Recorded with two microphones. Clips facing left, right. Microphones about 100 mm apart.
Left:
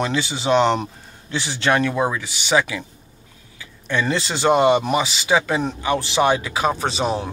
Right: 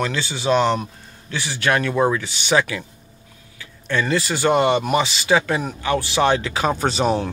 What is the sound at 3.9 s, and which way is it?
A man's voice, 20° left (ahead or behind).